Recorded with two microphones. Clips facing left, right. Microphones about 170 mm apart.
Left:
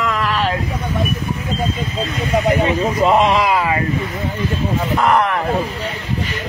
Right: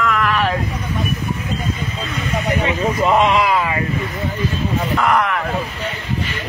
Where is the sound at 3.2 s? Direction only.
35° left (ahead or behind).